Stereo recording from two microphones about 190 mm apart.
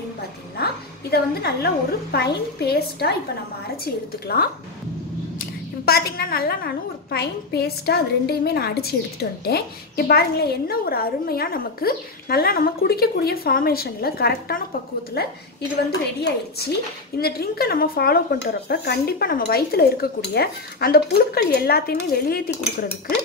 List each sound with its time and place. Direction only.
1.1 s a woman's voice: 55° left (ahead or behind)
5.9 s a woman's voice: 55° left (ahead or behind)
16.2 s speech: 55° left (ahead or behind)